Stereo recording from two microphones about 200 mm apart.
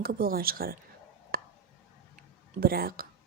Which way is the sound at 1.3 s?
45° right (ahead or behind).